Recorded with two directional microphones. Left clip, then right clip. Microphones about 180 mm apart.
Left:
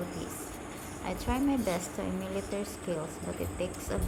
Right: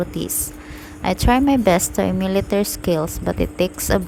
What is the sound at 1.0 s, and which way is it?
A woman's voice, 55° right (ahead or behind).